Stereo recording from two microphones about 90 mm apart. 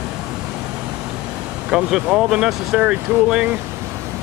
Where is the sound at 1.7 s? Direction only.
5° right (ahead or behind).